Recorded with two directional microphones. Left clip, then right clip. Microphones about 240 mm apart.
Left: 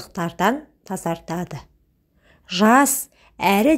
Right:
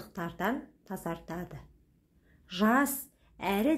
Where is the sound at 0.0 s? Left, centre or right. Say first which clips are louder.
Left 13 dB; left.